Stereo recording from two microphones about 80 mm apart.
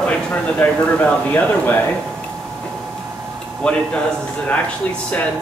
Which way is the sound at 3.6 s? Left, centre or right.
Centre.